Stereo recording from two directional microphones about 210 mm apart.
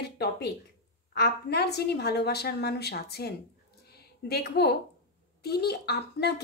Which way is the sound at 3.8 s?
50° left (ahead or behind).